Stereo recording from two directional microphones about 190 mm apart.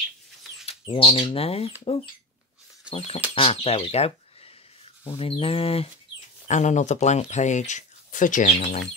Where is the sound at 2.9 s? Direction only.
30° left (ahead or behind).